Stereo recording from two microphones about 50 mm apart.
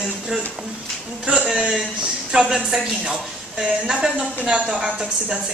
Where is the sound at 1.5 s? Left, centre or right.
Centre.